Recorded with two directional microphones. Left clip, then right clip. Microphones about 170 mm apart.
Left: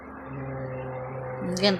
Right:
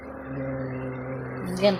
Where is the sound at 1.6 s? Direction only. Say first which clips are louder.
Right 2 dB; 15° left (ahead or behind).